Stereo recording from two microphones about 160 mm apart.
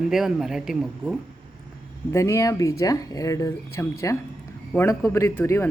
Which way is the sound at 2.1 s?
20° left (ahead or behind).